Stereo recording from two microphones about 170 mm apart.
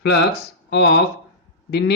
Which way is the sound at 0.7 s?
85° left.